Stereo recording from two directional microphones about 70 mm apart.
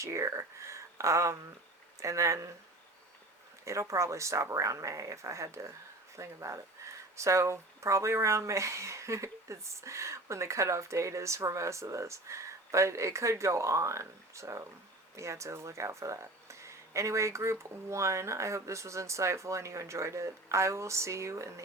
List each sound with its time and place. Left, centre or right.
0.0 s speech: right
3.6 s speech: right